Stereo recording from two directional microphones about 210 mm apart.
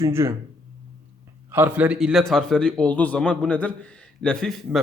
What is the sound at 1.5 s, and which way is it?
A man's voice, 10° right (ahead or behind).